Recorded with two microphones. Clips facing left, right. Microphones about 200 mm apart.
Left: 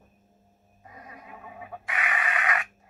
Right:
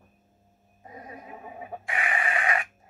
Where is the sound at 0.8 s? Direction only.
30° right (ahead or behind).